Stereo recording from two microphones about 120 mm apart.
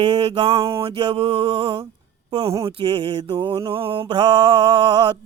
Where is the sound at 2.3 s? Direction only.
50° right (ahead or behind).